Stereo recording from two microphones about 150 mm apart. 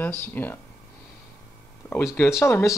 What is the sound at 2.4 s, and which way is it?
Speech, 20° left (ahead or behind).